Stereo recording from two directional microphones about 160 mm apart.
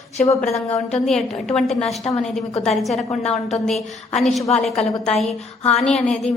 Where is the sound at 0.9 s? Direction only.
5° left (ahead or behind).